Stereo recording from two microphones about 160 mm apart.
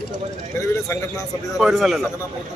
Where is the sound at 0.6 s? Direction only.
15° left (ahead or behind).